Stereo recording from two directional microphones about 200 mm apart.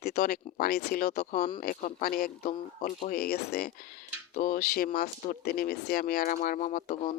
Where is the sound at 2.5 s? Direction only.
35° left (ahead or behind).